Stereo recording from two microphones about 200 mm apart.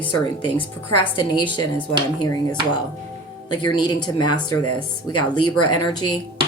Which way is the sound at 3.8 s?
20° left (ahead or behind).